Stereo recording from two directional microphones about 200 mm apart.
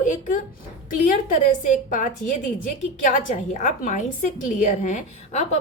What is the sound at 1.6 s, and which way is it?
A woman's voice, 40° left (ahead or behind).